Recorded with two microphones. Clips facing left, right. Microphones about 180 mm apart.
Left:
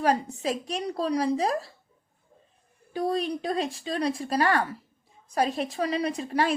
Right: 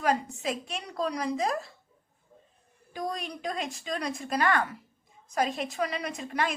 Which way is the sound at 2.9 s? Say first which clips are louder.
Left 8 dB; 35° left (ahead or behind).